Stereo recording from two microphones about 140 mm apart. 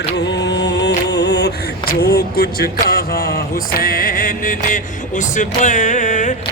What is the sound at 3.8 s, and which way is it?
Music, 90° left.